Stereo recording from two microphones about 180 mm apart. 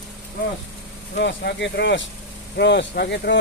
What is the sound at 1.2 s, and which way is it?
Speech, 75° left (ahead or behind).